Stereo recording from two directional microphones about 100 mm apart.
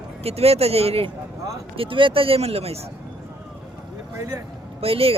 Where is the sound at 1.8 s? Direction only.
60° right (ahead or behind); by 2.8 s 90° right.